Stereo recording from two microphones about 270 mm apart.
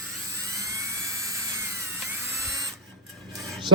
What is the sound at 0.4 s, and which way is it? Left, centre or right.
Dental drill, centre.